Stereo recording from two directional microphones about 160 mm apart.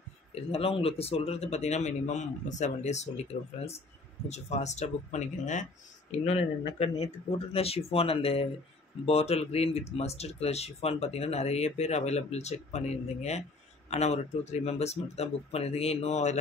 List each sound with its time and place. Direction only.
0.3 s speech: 40° left (ahead or behind)
4.3 s speech: 45° left (ahead or behind)